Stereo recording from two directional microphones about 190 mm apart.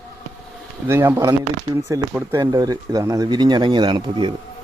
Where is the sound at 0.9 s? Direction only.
10° right (ahead or behind).